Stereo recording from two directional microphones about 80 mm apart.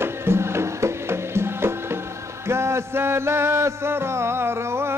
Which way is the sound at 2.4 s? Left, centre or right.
Right.